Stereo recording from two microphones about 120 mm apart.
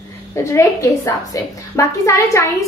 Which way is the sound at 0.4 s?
25° left (ahead or behind).